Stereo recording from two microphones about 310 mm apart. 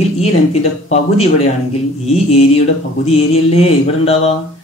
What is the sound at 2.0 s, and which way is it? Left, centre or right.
Speech, left.